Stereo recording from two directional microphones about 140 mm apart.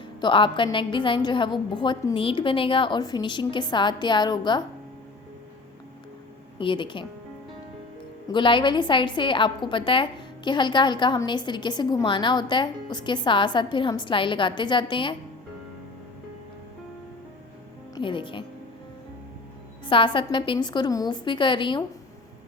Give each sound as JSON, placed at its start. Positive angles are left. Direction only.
{"t": 0.0, "sound": "a woman's voice", "side_deg": 35}
{"t": 6.6, "sound": "a woman's voice", "side_deg": 35}
{"t": 8.3, "sound": "a woman's voice", "side_deg": 35}
{"t": 17.9, "sound": "a woman's voice", "side_deg": 35}
{"t": 19.8, "sound": "a woman's voice", "side_deg": 35}